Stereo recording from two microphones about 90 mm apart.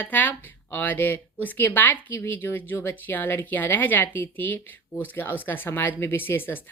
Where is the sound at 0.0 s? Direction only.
20° left (ahead or behind).